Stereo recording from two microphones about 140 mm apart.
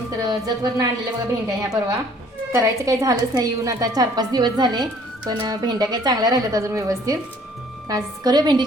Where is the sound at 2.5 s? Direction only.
20° right (ahead or behind).